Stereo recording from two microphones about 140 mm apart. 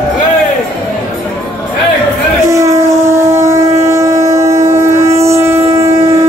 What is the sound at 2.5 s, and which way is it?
Train, 20° right (ahead or behind).